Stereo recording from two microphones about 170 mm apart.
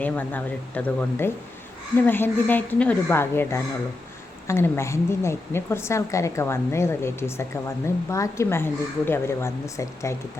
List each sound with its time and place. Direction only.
0.0 s a woman's voice: 10° left (ahead or behind)